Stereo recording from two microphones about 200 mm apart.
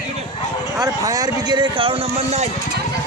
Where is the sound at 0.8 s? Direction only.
20° right (ahead or behind).